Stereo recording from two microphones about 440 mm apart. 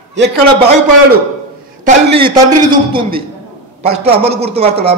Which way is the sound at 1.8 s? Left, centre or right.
Centre.